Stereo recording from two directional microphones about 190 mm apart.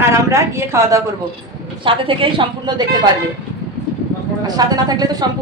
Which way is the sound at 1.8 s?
25° right (ahead or behind).